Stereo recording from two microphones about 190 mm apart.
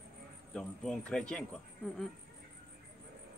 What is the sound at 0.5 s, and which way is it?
Speech, 5° left (ahead or behind).